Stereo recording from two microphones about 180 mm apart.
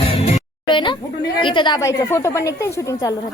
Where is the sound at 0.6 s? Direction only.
25° left (ahead or behind).